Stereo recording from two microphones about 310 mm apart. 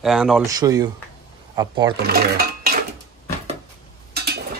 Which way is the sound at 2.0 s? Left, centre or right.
Right.